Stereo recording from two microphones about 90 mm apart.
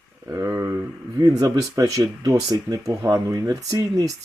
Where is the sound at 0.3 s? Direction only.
35° right (ahead or behind).